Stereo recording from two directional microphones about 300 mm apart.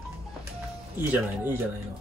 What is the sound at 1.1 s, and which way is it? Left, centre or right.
Speech, centre.